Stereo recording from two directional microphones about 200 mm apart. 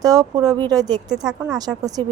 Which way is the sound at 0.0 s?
20° right (ahead or behind).